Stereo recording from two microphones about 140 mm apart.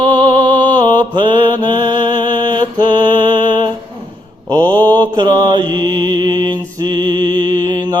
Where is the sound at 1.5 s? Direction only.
30° right (ahead or behind).